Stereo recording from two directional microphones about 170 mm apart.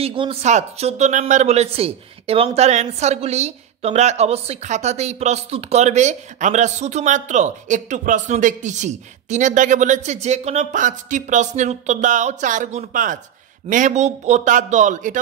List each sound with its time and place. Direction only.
0.0 s speech: 30° right (ahead or behind)